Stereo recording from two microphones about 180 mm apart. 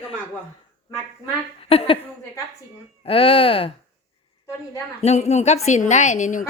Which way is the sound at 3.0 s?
30° left (ahead or behind).